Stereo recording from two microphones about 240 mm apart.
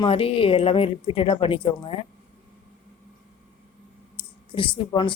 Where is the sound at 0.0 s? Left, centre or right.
Left.